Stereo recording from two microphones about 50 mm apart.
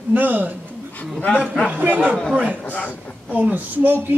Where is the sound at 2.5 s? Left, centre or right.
Left.